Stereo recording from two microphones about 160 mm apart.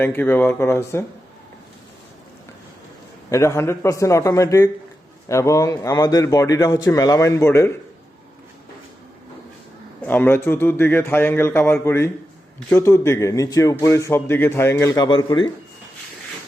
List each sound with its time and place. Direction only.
0.0 s a man's voice: 10° left (ahead or behind)
3.2 s speech: 20° left (ahead or behind)
10.0 s a man's voice: 10° left (ahead or behind); by 15.4 s 30° left (ahead or behind)